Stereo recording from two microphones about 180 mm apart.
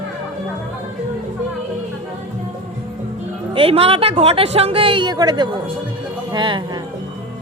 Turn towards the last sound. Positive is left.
turn(degrees=-25)  # may be behind; listen again after turning